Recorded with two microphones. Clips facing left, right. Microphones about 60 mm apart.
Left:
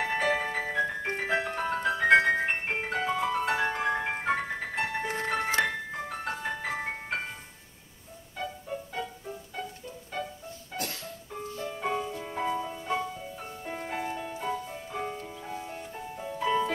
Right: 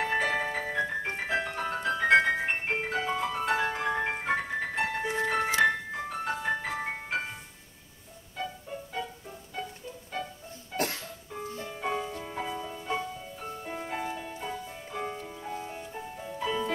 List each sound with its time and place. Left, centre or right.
0.0 s music: centre
5.0 s music: left
5.7 s music: centre
8.4 s music: centre
11.6 s music: centre